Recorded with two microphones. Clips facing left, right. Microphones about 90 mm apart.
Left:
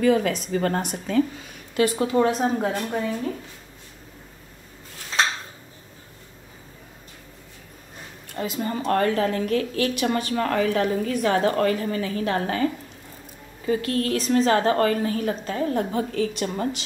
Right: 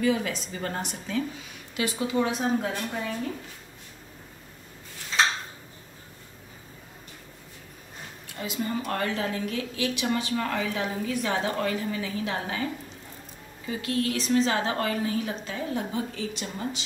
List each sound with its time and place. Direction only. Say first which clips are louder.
0.0 s speech: left 6 dB; 55° left (ahead or behind)
8.4 s speech: left 3 dB; 45° left (ahead or behind)
13.7 s speech: left 5 dB; 45° left (ahead or behind)